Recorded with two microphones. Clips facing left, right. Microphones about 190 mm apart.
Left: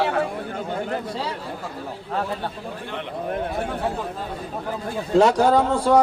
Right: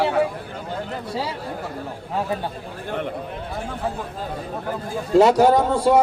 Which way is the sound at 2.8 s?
45° right (ahead or behind).